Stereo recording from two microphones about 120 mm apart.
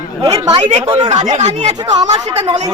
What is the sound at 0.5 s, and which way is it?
Speech, 55° right (ahead or behind).